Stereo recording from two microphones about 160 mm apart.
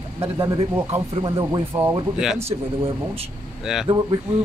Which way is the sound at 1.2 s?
30° right (ahead or behind).